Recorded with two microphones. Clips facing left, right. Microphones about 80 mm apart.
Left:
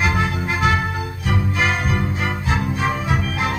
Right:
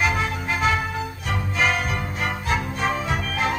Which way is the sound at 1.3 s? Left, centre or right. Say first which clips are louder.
Left 2 dB; centre.